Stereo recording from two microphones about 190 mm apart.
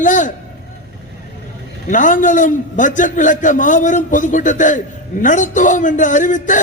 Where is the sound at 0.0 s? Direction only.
40° left (ahead or behind).